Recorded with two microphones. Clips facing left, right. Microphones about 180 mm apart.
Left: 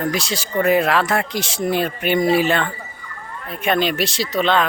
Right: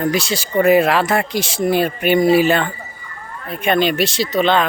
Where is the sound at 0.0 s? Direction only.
Centre (ahead or behind).